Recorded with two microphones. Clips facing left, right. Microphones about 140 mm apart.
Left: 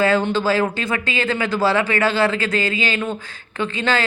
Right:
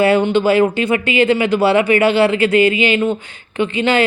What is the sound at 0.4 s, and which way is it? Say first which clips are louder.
Speech: right 6 dB; 20° right (ahead or behind).